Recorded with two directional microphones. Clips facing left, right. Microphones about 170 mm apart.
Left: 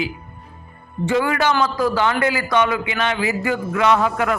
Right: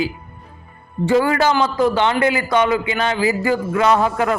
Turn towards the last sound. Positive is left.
turn(degrees=-30)  # may be behind; listen again after turning